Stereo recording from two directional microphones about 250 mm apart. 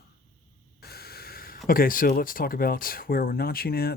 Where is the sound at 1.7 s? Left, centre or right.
Left.